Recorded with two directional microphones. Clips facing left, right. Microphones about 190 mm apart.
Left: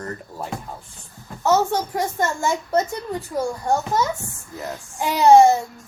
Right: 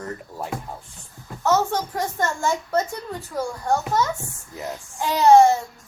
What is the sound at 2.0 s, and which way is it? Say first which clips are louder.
A child's voice: left 2 dB; 15° left (ahead or behind).